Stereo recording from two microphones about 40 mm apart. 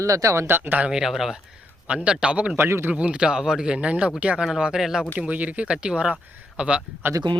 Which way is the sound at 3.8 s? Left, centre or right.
Right.